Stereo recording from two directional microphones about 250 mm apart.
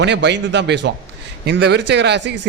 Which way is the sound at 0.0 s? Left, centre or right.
Right.